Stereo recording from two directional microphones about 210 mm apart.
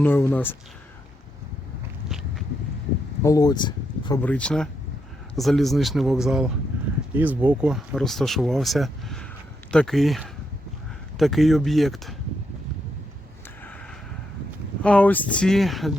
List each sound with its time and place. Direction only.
0.0 s speech: 10° left (ahead or behind)
2.0 s vehicle: centre (ahead or behind)
3.2 s speech: 20° left (ahead or behind)
4.2 s speech: 5° left (ahead or behind)
14.8 s speech: 5° left (ahead or behind)